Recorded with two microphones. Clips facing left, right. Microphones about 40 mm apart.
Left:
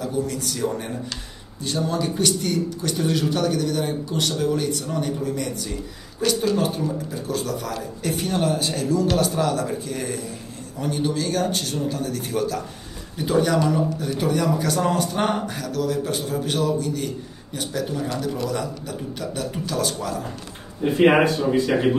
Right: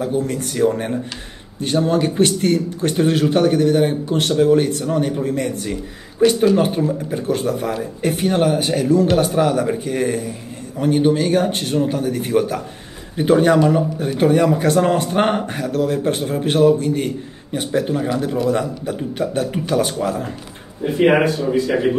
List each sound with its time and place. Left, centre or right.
0.0 s speech: right
21.1 s speech: centre